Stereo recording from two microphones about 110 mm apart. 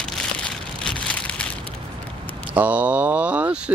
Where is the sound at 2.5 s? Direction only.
15° right (ahead or behind).